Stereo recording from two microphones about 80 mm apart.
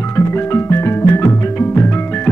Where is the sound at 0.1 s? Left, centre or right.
Left.